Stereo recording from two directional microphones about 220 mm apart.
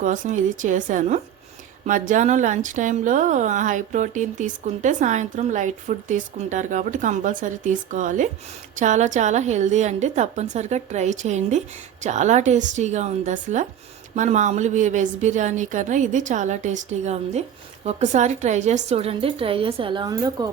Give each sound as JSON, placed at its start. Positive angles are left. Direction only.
{"t": 0.0, "sound": "a woman's voice", "side_deg": -35}